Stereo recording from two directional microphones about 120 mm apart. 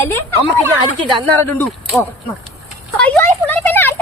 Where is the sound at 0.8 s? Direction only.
40° right (ahead or behind).